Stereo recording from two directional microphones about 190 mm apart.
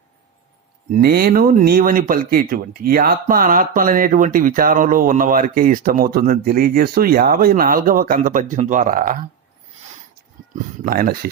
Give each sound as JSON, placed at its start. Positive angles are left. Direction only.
{"t": 1.0, "sound": "speech", "side_deg": -50}
{"t": 10.5, "sound": "speech", "side_deg": -50}